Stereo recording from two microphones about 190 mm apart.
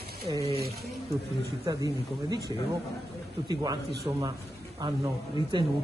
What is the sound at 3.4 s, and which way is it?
Speech, 20° right (ahead or behind).